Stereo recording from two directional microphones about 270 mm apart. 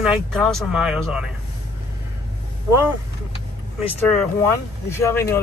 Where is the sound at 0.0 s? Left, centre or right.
Centre.